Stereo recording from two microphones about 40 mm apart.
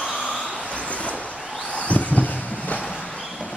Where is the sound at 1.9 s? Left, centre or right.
Left.